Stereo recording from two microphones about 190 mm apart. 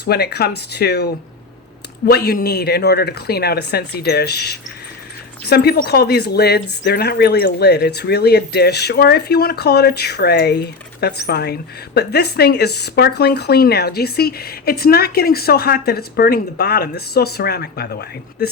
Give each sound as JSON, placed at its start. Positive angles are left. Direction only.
{"t": 0.0, "sound": "speech", "side_deg": 55}